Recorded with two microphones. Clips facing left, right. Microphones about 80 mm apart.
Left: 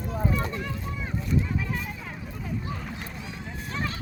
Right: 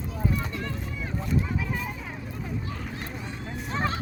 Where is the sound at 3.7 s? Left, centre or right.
Right.